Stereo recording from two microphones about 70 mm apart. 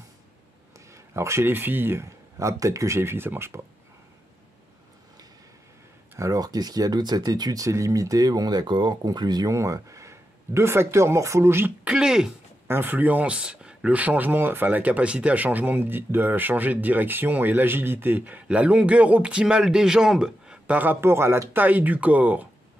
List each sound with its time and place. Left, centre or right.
0.9 s speech: right
2.3 s speech: right
6.1 s speech: right
9.5 s speech: right
11.9 s speech: centre
12.6 s speech: right
21.6 s speech: right